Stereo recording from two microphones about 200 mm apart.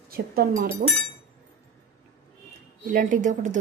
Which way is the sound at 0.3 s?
45° right (ahead or behind).